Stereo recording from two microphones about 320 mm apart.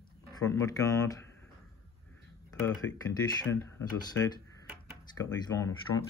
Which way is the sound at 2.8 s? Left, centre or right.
Left.